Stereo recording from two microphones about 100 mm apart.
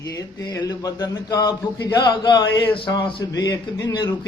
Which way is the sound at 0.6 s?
40° left (ahead or behind).